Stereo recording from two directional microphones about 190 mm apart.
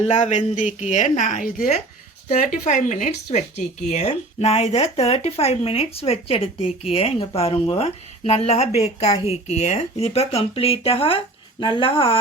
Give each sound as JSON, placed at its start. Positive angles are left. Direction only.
{"t": 0.0, "sound": "speech", "side_deg": 35}